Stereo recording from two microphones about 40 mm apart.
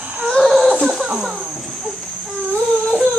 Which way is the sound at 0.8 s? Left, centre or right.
Centre.